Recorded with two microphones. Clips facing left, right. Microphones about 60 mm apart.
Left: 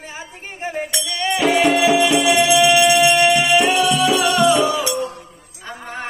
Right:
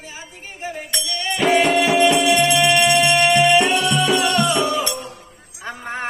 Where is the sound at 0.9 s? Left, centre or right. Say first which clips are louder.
Left 2 dB; centre.